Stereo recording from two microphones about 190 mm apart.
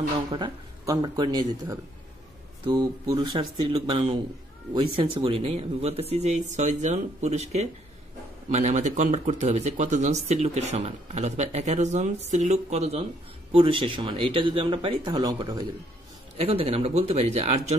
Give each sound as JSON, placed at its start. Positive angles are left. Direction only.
{"t": 0.3, "sound": "speech", "side_deg": -20}
{"t": 16.3, "sound": "speech", "side_deg": -30}